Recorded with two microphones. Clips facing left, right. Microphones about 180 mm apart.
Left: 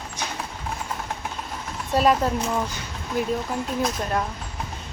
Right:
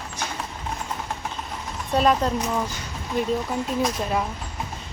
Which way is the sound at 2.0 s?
Centre (ahead or behind).